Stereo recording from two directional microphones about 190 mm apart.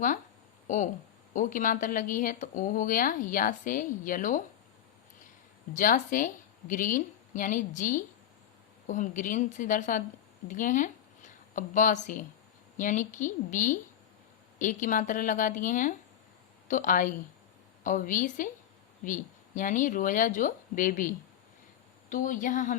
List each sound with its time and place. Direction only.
1.3 s speech: 45° left (ahead or behind)
5.7 s speech: 45° left (ahead or behind)
22.1 s speech: 45° left (ahead or behind)